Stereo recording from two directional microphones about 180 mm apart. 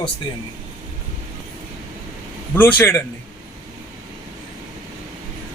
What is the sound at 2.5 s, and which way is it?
Speech, 10° left (ahead or behind).